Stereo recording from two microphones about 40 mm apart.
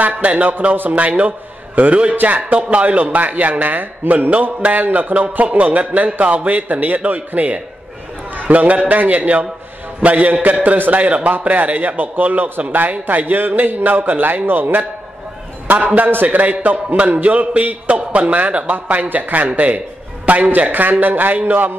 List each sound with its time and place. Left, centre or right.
0.0 s a man's voice: right
1.8 s a man's voice: right